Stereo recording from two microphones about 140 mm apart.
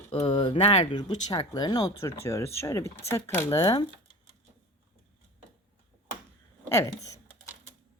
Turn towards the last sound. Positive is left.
turn(degrees=20)  # may be behind; listen again after turning